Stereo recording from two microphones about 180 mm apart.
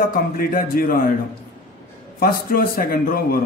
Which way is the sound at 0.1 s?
55° left (ahead or behind).